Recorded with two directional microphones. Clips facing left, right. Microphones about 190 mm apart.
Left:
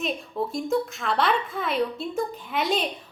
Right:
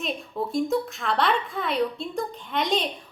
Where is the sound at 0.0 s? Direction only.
Centre (ahead or behind).